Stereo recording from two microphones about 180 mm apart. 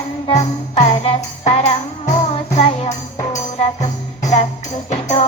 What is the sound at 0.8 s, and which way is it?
Music, 35° left (ahead or behind).